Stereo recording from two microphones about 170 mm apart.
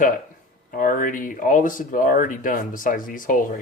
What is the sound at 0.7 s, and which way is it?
Speech, 55° left (ahead or behind).